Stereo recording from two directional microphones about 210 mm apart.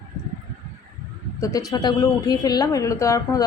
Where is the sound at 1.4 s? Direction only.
15° left (ahead or behind).